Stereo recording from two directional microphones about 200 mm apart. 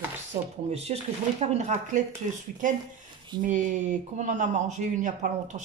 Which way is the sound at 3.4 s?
40° right (ahead or behind).